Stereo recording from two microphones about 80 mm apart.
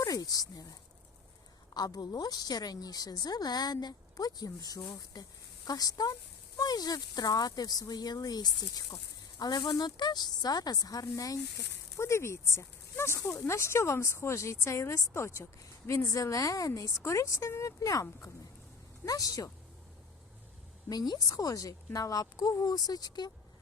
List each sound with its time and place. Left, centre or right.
0.0 s speech: left
1.7 s a woman's voice: left
11.9 s a woman's voice: left
20.9 s speech: left